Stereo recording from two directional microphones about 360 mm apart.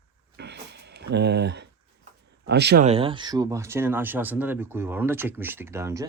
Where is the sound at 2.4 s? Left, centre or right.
Right.